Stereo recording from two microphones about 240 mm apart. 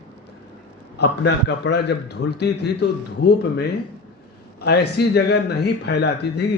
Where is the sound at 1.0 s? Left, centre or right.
Left.